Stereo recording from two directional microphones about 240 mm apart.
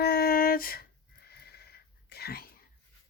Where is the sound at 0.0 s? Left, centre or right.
Left.